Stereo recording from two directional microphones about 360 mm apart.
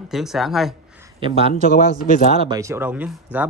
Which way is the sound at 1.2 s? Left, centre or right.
Centre.